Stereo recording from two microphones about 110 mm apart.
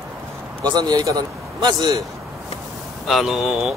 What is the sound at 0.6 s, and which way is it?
A man's voice, 40° right (ahead or behind).